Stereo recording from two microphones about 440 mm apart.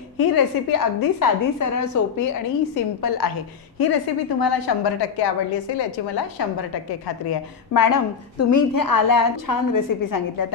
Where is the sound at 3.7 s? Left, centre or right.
Left.